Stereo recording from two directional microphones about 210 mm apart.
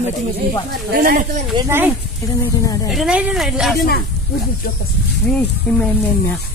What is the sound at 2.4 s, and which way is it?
Speech, 15° left (ahead or behind).